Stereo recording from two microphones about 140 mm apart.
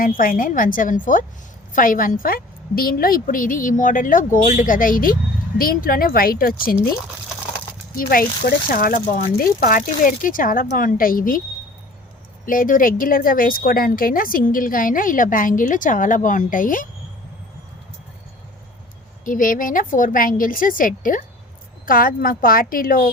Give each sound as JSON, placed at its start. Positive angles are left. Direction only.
{"t": 0.0, "sound": "speech", "side_deg": 85}
{"t": 7.9, "sound": "speech", "side_deg": 90}
{"t": 12.5, "sound": "speech", "side_deg": 80}
{"t": 19.2, "sound": "speech", "side_deg": 75}
{"t": 21.8, "sound": "speech", "side_deg": 90}